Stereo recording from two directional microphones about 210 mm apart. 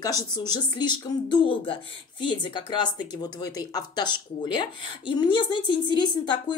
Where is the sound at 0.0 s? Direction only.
20° left (ahead or behind).